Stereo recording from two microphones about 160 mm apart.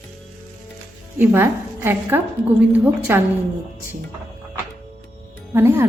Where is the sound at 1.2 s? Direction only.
10° right (ahead or behind).